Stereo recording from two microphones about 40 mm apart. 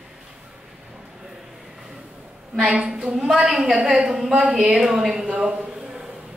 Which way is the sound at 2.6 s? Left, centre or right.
Right.